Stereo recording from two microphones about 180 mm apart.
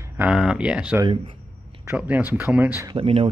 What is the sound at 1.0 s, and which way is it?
Speech, 30° right (ahead or behind).